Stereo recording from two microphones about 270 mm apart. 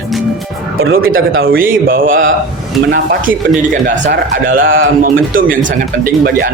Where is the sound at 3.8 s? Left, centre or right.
Right.